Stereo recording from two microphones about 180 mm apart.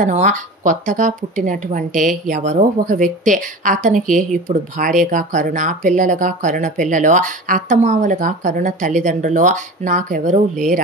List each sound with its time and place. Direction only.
0.0 s a woman's voice: 40° right (ahead or behind)